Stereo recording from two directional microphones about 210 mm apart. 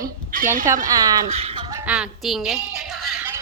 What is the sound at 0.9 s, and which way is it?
Speech, 15° right (ahead or behind).